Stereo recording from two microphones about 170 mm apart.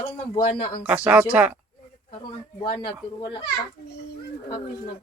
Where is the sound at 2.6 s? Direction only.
30° left (ahead or behind).